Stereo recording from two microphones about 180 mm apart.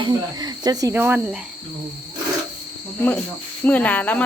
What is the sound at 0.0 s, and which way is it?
Cricket, 25° right (ahead or behind).